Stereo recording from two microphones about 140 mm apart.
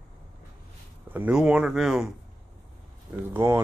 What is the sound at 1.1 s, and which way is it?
Speech, 10° right (ahead or behind).